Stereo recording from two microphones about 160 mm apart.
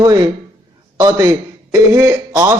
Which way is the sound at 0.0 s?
25° right (ahead or behind).